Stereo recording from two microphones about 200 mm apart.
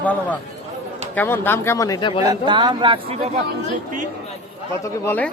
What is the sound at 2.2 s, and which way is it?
Speech, 20° right (ahead or behind).